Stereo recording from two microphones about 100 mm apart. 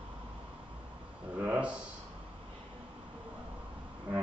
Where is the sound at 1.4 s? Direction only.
15° right (ahead or behind).